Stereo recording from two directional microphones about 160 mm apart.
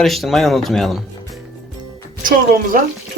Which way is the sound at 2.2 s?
60° right (ahead or behind).